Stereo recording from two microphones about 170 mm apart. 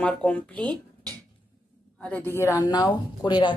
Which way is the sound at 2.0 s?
10° left (ahead or behind).